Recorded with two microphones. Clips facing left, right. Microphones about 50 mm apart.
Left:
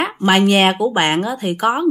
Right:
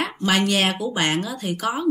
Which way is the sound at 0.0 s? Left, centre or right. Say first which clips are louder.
Left 7 dB; left.